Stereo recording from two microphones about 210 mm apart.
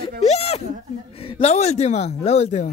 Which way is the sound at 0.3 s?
30° left (ahead or behind).